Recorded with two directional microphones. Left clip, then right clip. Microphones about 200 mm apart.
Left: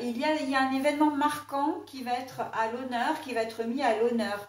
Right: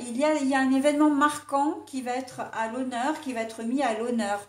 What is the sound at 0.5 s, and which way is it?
A woman's voice, 50° right (ahead or behind).